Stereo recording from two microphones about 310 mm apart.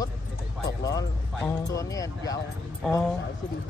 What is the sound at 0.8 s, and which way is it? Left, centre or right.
Speech, centre.